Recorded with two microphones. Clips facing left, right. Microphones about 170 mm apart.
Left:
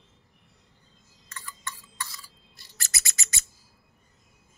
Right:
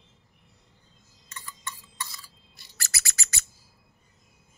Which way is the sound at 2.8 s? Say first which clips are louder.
Even; 20° left (ahead or behind).